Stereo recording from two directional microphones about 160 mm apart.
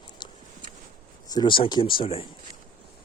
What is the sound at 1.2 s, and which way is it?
Speech, 25° left (ahead or behind).